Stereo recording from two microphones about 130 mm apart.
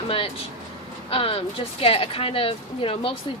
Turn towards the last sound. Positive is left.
turn(degrees=45)  # may be behind; listen again after turning